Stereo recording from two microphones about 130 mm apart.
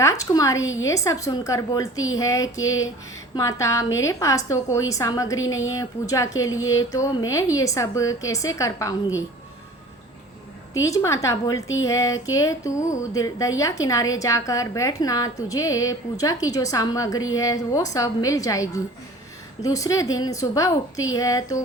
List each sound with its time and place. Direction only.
0.0 s a woman's voice: 25° left (ahead or behind)
10.8 s a woman's voice: 25° left (ahead or behind)